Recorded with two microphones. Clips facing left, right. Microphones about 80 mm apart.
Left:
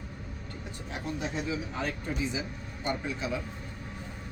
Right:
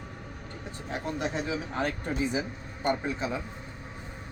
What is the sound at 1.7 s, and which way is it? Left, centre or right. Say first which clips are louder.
Speech: right 3 dB; right.